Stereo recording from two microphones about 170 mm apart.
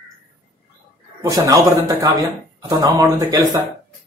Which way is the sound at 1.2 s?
20° right (ahead or behind).